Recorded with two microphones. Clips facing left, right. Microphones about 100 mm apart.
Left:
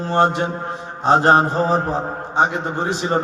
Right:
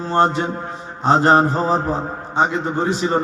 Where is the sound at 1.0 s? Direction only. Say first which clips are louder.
Even; 15° left (ahead or behind).